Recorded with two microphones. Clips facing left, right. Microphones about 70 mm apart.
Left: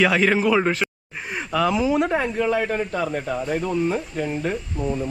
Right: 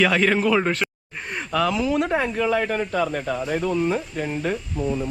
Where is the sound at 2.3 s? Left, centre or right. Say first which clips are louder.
Even; right.